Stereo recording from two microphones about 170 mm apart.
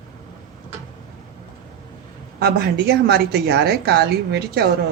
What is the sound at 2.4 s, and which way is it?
A woman's voice, 70° right (ahead or behind).